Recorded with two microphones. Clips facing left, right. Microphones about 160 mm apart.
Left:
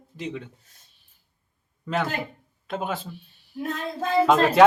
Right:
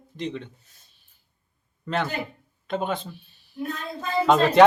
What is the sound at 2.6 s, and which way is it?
Speech, 5° left (ahead or behind).